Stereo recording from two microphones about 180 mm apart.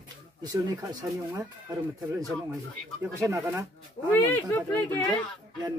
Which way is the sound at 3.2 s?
15° right (ahead or behind).